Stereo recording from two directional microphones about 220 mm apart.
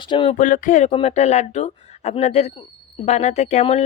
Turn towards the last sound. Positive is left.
turn(degrees=30)  # may be behind; listen again after turning